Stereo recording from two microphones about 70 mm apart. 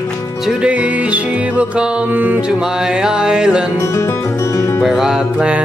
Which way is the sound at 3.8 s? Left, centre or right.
Left.